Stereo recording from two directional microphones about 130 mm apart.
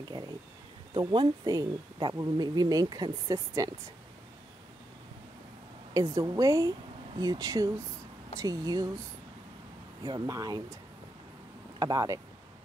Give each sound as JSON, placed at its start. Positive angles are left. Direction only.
{"t": 0.9, "sound": "speech", "side_deg": -35}
{"t": 5.9, "sound": "speech", "side_deg": -25}
{"t": 10.0, "sound": "speech", "side_deg": -25}
{"t": 11.8, "sound": "speech", "side_deg": -30}